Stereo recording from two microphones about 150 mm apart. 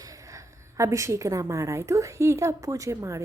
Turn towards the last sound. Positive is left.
turn(degrees=-20)  # may be behind; listen again after turning